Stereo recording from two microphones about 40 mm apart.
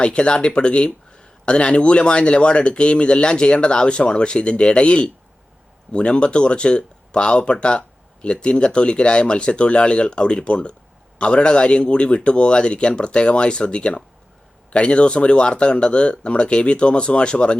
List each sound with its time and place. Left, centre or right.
0.0 s speech: left